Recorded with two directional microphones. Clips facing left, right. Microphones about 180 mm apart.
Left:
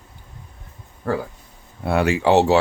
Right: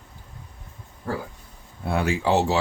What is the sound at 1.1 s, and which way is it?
Speech, 65° left (ahead or behind).